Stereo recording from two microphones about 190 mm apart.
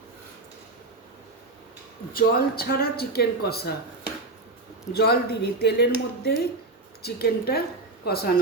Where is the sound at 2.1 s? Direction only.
50° left (ahead or behind).